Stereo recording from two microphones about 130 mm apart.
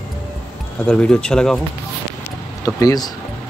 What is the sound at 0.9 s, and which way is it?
Speech, 5° left (ahead or behind).